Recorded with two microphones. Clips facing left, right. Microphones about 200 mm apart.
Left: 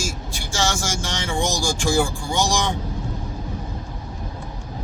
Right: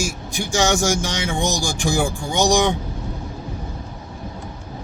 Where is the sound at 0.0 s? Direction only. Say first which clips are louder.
Right 4 dB; 15° right (ahead or behind).